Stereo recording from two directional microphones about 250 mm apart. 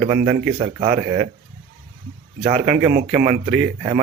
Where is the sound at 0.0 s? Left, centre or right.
Right.